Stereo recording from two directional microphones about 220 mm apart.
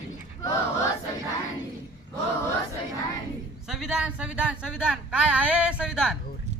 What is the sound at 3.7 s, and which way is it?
Speech, 5° right (ahead or behind).